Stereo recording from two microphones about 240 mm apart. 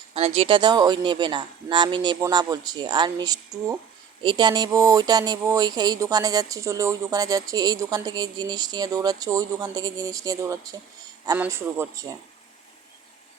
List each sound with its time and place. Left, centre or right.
0.1 s speech: right